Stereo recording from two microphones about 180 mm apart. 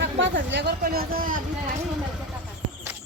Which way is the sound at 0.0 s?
90° right.